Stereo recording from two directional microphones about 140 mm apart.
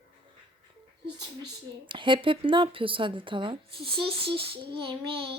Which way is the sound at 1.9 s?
35° right (ahead or behind).